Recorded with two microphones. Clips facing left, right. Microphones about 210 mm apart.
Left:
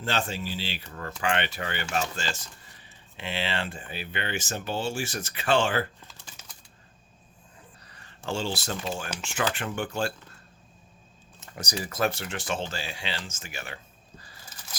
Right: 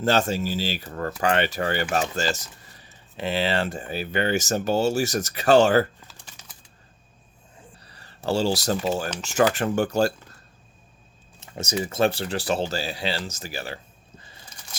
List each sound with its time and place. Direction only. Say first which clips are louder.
0.0 s speech: right 8 dB; 40° right (ahead or behind)
6.1 s typing: right 1 dB; 5° right (ahead or behind)
7.9 s speech: right 7 dB; 35° right (ahead or behind)
11.3 s speech: right 7 dB; 25° right (ahead or behind)